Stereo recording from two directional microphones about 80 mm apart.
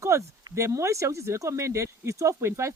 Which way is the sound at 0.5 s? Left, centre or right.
Right.